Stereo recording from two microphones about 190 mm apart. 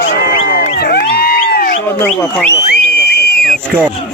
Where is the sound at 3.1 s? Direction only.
60° left (ahead or behind).